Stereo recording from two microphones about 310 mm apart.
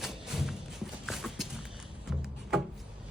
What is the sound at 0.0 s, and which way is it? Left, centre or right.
Music, centre.